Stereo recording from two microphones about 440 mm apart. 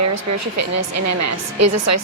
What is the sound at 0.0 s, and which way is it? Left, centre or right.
A woman's voice, right.